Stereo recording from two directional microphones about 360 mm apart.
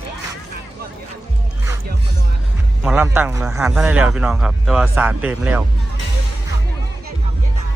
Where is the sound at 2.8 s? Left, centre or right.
Centre.